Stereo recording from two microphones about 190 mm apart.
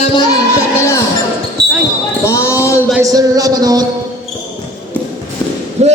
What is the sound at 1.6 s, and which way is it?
Basketball bounce, 60° right (ahead or behind).